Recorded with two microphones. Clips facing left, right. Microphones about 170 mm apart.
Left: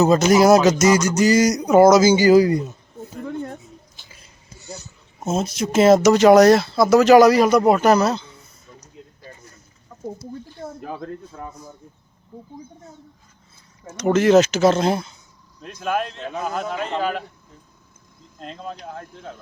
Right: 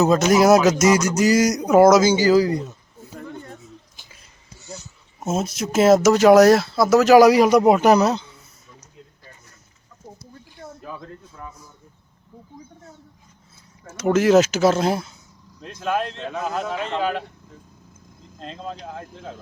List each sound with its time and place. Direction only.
0.0 s a man's voice: centre (ahead or behind)
5.2 s speech: 5° right (ahead or behind)
9.9 s chicken: 40° left (ahead or behind)
11.3 s speech: 60° left (ahead or behind)
13.8 s speech: 5° right (ahead or behind)
18.3 s speech: 5° left (ahead or behind)